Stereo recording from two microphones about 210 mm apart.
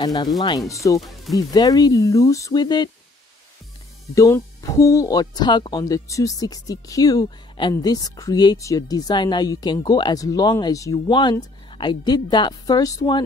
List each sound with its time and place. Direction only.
0.0 s speech: 20° left (ahead or behind)
0.9 s speech: centre (ahead or behind)
1.3 s speech: 15° left (ahead or behind)
4.1 s speech: 15° left (ahead or behind)